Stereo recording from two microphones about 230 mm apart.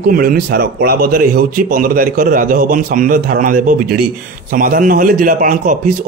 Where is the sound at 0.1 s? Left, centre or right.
Right.